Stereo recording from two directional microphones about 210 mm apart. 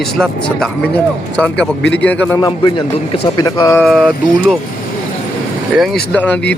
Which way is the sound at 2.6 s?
25° left (ahead or behind).